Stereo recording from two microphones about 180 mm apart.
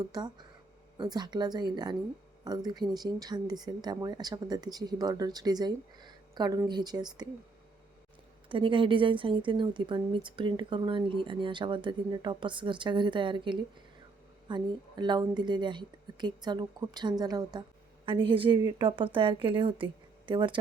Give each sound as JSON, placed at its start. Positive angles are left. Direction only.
{"t": 0.0, "sound": "a woman's voice", "side_deg": -25}
{"t": 8.4, "sound": "a woman's voice", "side_deg": -30}